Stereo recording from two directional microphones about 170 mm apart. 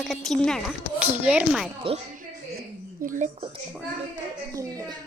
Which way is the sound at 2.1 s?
60° right (ahead or behind).